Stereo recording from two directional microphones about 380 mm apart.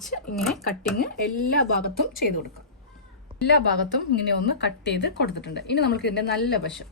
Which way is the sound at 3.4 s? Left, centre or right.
Left.